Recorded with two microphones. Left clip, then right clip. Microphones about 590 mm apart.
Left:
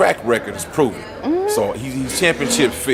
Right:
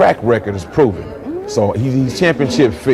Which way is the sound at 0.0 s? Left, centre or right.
Right.